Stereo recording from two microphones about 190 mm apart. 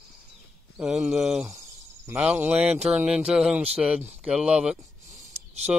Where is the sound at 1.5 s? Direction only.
15° right (ahead or behind).